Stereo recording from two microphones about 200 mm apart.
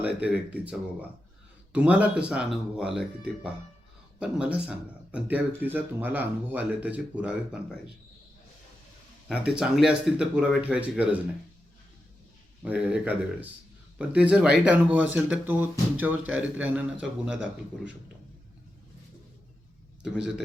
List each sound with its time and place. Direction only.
0.0 s speech: 5° right (ahead or behind)
9.3 s speech: 5° right (ahead or behind)
12.6 s speech: 5° right (ahead or behind)